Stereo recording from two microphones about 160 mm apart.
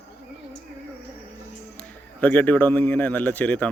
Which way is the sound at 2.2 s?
10° left (ahead or behind).